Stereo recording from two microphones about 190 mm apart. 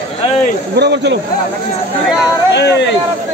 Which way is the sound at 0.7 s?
60° right (ahead or behind).